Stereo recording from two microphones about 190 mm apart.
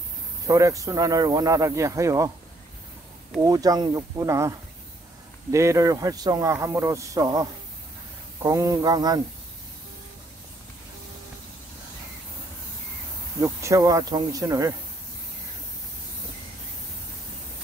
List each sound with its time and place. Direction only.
0.5 s speech: 15° right (ahead or behind)
3.4 s speech: 20° right (ahead or behind)
13.4 s speech: 15° right (ahead or behind)